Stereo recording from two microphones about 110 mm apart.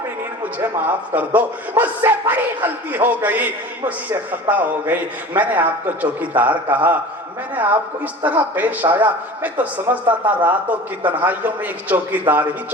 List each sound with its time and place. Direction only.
0.6 s a man's voice: 15° right (ahead or behind)
8.2 s a man's voice: 15° right (ahead or behind)